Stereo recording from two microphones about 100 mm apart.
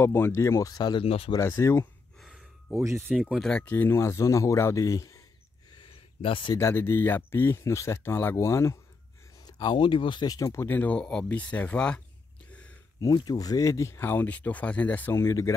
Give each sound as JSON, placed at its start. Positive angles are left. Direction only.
{"t": 0.0, "sound": "speech", "side_deg": 25}
{"t": 1.0, "sound": "speech", "side_deg": 70}
{"t": 1.4, "sound": "speech", "side_deg": 30}
{"t": 2.1, "sound": "gasp", "side_deg": -5}
{"t": 2.7, "sound": "speech", "side_deg": -30}
{"t": 3.2, "sound": "speech", "side_deg": -5}
{"t": 3.6, "sound": "speech", "side_deg": 20}
{"t": 5.7, "sound": "a sound", "side_deg": 55}
{"t": 6.5, "sound": "speech", "side_deg": 25}
{"t": 9.4, "sound": "speech", "side_deg": 40}
{"t": 10.2, "sound": "speech", "side_deg": 35}
{"t": 12.4, "sound": "a sound", "side_deg": 10}
{"t": 13.0, "sound": "speech", "side_deg": 45}
{"t": 15.2, "sound": "speech", "side_deg": 30}